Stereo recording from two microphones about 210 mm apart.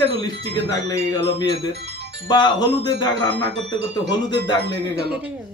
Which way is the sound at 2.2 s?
20° left (ahead or behind).